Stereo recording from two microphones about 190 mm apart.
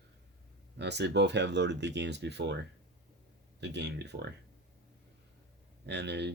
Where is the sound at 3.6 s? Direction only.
65° right (ahead or behind).